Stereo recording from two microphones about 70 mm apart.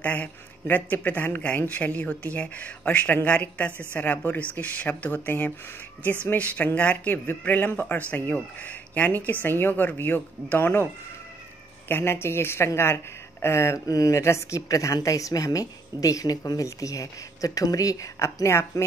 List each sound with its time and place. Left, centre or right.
0.0 s speech: left
11.9 s speech: left
13.8 s speech: left